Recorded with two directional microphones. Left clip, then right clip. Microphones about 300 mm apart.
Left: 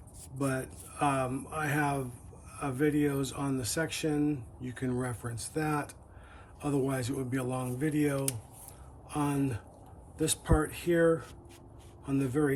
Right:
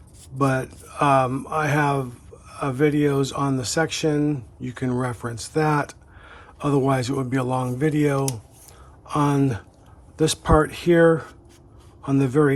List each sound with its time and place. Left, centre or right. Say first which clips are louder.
0.3 s speech: right 11 dB; centre